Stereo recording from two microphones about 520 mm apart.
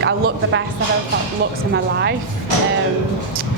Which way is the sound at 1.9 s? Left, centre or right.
Centre.